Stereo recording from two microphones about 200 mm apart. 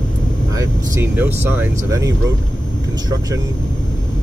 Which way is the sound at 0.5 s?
15° right (ahead or behind).